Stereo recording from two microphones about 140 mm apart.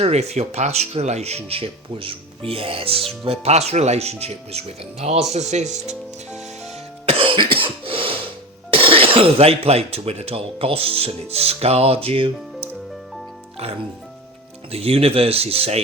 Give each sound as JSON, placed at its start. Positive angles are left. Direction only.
{"t": 0.0, "sound": "speech", "side_deg": -50}
{"t": 7.0, "sound": "cough", "side_deg": -40}
{"t": 8.7, "sound": "speech", "side_deg": -40}
{"t": 14.7, "sound": "speech", "side_deg": -45}